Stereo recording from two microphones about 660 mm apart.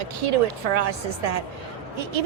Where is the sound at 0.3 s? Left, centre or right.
Right.